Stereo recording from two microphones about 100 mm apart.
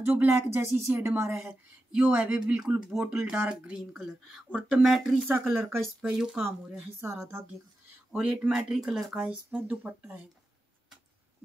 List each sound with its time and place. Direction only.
0.0 s speech: 20° right (ahead or behind)
1.3 s speech: 5° right (ahead or behind)
5.5 s speech: 25° right (ahead or behind)
6.0 s speech: 10° right (ahead or behind)
6.8 s speech: 25° right (ahead or behind)
8.1 s speech: 10° right (ahead or behind)